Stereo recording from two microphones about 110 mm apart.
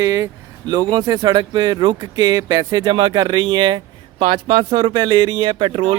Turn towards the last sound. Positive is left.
turn(degrees=-55)  # may be behind; listen again after turning